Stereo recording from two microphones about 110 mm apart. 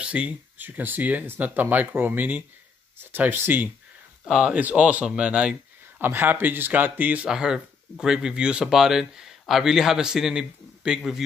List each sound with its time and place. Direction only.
0.0 s a man's voice: 10° right (ahead or behind)
4.2 s a man's voice: 5° right (ahead or behind)